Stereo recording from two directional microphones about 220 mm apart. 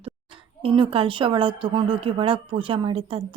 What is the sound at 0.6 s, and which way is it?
A woman's voice, 25° right (ahead or behind).